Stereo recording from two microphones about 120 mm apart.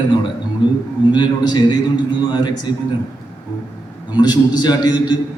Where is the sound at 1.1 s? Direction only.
40° left (ahead or behind).